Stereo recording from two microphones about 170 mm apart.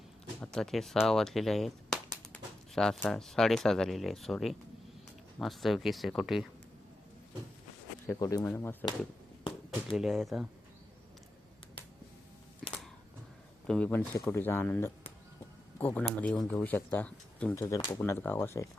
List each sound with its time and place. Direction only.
0.4 s speech: 5° left (ahead or behind)
8.0 s speech: 20° left (ahead or behind)
9.9 s speech: centre (ahead or behind)
12.6 s a sound: centre (ahead or behind)
13.7 s speech: 5° left (ahead or behind)